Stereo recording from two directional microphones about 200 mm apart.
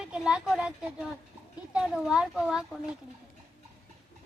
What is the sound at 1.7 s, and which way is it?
Speech, 5° right (ahead or behind).